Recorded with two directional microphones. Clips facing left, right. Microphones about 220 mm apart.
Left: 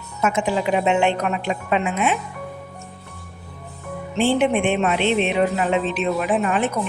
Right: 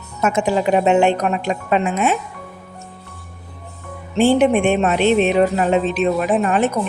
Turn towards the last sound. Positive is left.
turn(degrees=-40)  # may be behind; listen again after turning